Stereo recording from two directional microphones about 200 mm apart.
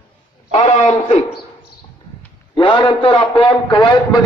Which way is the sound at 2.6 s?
25° left (ahead or behind).